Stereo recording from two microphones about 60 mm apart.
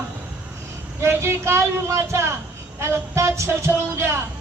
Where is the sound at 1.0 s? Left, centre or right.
Right.